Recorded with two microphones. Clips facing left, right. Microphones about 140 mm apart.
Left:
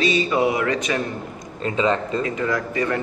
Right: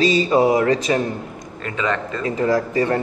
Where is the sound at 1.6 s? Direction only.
25° left (ahead or behind).